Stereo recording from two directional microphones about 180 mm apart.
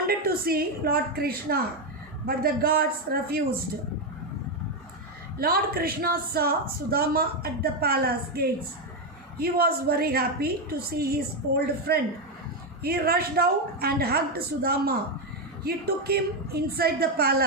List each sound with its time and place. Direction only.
0.1 s a woman's voice: 55° right (ahead or behind)
5.4 s a woman's voice: 55° right (ahead or behind)